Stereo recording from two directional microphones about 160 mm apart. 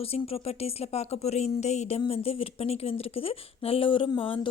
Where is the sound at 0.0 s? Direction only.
35° left (ahead or behind).